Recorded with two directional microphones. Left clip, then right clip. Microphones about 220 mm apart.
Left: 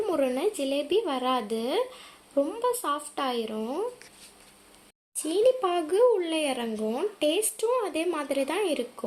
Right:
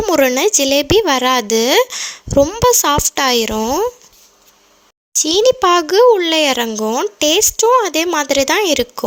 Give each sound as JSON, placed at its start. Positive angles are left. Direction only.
{"t": 0.0, "sound": "a child's voice", "side_deg": -45}
{"t": 5.2, "sound": "a child's voice", "side_deg": -45}